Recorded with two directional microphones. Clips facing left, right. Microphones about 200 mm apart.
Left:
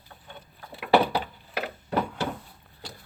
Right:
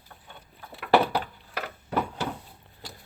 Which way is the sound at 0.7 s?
5° left (ahead or behind).